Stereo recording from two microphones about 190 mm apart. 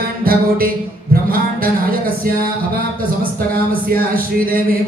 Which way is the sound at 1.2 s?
50° right (ahead or behind).